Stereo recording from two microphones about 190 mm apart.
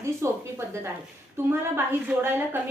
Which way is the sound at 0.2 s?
15° right (ahead or behind).